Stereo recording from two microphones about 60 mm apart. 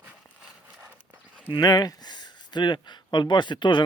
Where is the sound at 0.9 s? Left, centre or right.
Right.